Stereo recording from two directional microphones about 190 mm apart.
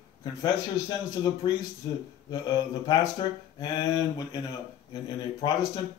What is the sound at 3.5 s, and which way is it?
Speech, 20° left (ahead or behind).